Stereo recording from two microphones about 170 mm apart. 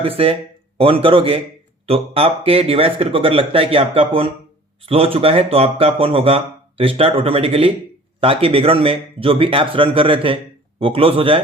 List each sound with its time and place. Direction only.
0.0 s speech: 35° right (ahead or behind)